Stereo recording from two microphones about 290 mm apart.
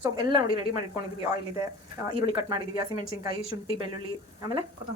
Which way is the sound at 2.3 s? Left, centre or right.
Centre.